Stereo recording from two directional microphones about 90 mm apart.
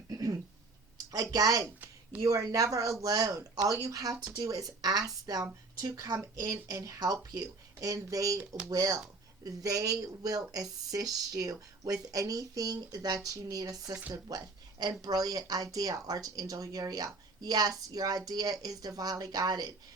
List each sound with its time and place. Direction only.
1.1 s speech: 45° right (ahead or behind)
1.6 s a sound: 15° right (ahead or behind)
2.2 s speech: 40° right (ahead or behind)